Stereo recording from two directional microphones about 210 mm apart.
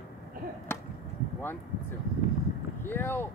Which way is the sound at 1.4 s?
10° left (ahead or behind).